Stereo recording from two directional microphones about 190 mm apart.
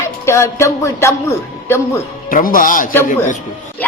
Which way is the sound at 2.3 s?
45° left (ahead or behind).